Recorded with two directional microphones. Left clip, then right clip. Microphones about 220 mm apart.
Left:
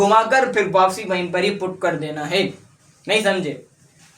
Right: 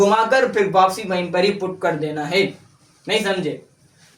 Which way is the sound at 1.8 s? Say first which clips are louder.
Even; 20° left (ahead or behind).